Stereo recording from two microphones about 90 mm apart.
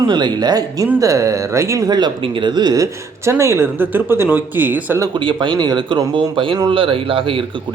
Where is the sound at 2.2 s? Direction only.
60° right (ahead or behind); by 4.9 s 20° right (ahead or behind).